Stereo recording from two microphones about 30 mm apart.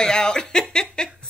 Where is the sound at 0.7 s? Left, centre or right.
Left.